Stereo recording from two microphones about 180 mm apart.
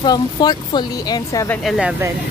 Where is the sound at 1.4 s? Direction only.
Centre (ahead or behind).